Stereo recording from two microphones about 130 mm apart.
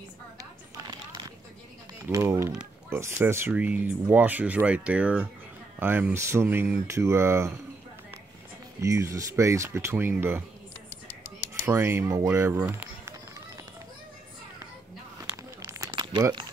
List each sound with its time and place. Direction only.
2.0 s speech: 20° right (ahead or behind)
8.8 s speech: 25° right (ahead or behind)
11.6 s speech: 20° right (ahead or behind)
15.3 s a sound: 25° right (ahead or behind)
15.9 s crumpling: 35° right (ahead or behind)